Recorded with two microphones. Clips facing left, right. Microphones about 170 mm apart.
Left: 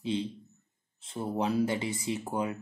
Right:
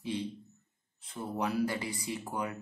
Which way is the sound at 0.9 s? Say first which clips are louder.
Left 4 dB; 25° left (ahead or behind).